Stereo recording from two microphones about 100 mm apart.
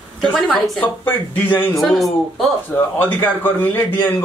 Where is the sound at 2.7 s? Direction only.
20° left (ahead or behind).